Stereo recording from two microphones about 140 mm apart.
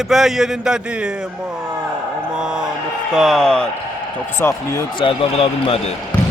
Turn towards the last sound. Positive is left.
turn(degrees=40)  # may be behind; listen again after turning